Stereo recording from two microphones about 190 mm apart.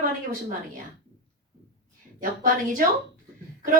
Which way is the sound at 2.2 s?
45° right (ahead or behind).